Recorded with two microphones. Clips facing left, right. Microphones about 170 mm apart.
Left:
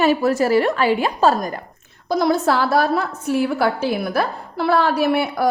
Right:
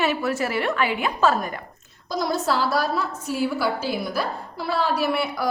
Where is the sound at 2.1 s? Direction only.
60° left (ahead or behind).